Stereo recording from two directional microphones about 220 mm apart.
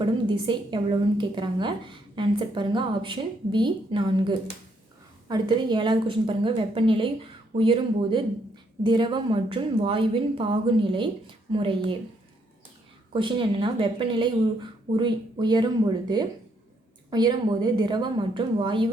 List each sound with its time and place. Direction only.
0.0 s a woman's voice: 20° right (ahead or behind)
13.1 s a woman's voice: 25° right (ahead or behind)